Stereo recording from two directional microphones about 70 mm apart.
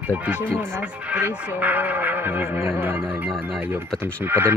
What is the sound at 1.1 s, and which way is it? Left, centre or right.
Speech, right.